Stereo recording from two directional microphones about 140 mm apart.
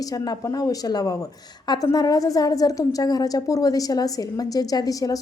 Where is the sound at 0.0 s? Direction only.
25° left (ahead or behind).